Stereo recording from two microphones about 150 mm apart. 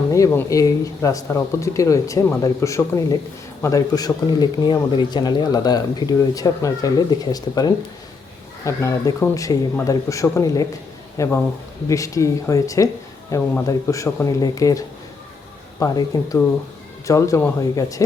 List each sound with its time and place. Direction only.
0.1 s speech: 20° left (ahead or behind)